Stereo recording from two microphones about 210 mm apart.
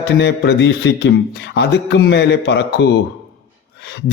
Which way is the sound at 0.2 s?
55° left (ahead or behind).